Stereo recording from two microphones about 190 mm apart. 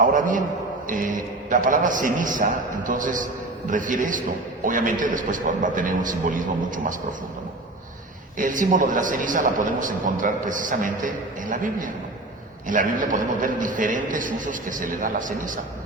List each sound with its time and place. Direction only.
0.0 s a man's voice: 45° right (ahead or behind)
8.4 s a man's voice: 45° right (ahead or behind)